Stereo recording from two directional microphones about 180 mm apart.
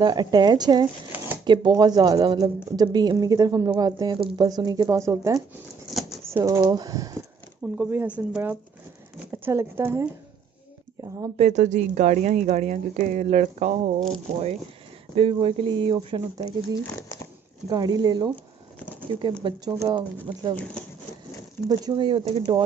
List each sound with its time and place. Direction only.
0.0 s speech: 25° right (ahead or behind)
1.1 s shuffling cards: 10° right (ahead or behind)
1.4 s speech: 25° right (ahead or behind)
5.9 s a sound: centre (ahead or behind)
6.3 s speech: 20° right (ahead or behind)
7.7 s speech: 10° right (ahead or behind)
11.3 s a woman's voice: 40° right (ahead or behind)
17.6 s speech: 25° right (ahead or behind)
19.4 s speech: 25° right (ahead or behind)
21.6 s speech: 25° right (ahead or behind)